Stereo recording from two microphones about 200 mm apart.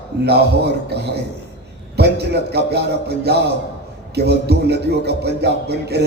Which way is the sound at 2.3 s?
55° right (ahead or behind).